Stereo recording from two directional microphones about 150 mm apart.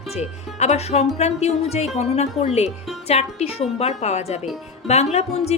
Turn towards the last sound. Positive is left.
turn(degrees=45)  # may be behind; listen again after turning